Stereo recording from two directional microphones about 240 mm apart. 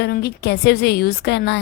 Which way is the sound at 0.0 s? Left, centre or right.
Left.